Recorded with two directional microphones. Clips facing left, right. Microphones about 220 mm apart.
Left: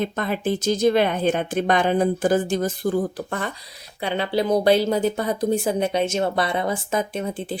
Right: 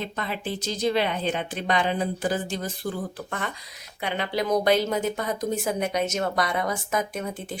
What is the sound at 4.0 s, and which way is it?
A woman's voice, 30° left (ahead or behind).